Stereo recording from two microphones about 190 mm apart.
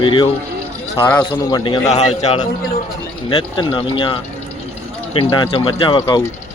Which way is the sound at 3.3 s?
25° left (ahead or behind).